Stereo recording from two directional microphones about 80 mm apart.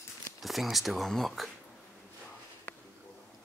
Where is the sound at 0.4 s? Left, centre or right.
Centre.